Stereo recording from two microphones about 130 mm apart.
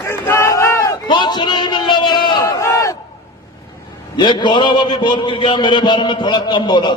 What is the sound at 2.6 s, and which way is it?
Crowd, 25° left (ahead or behind).